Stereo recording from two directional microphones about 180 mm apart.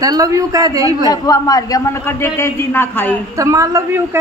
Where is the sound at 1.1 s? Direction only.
20° left (ahead or behind).